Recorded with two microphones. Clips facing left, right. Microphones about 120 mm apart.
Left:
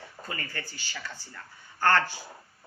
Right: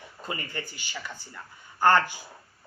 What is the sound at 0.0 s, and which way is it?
Speech, 20° right (ahead or behind).